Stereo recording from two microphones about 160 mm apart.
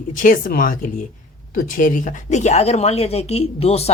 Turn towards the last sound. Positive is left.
turn(degrees=40)  # may be behind; listen again after turning